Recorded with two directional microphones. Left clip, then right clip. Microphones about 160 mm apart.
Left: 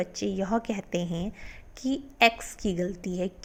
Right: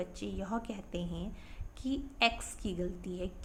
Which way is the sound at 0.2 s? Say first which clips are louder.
Left 10 dB; 35° left (ahead or behind).